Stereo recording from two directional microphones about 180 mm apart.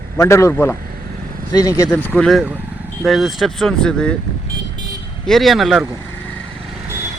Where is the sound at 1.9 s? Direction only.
10° left (ahead or behind).